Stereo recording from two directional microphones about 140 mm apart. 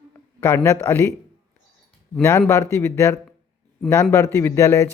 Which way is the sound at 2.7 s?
20° left (ahead or behind).